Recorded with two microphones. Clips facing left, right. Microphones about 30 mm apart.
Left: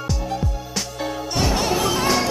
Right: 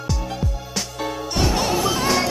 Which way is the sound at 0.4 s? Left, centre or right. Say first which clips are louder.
Even; centre.